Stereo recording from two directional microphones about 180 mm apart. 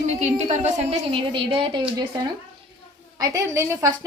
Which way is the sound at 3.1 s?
15° right (ahead or behind).